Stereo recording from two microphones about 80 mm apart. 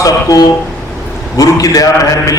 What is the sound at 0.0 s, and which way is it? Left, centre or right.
Mantra, left.